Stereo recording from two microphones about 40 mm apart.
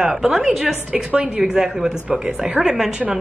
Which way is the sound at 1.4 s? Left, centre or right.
Centre.